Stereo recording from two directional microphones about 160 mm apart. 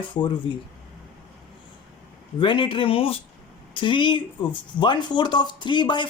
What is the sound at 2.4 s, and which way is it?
Speech, 30° left (ahead or behind).